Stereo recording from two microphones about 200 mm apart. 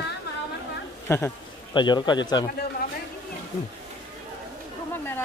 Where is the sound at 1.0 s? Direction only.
15° left (ahead or behind).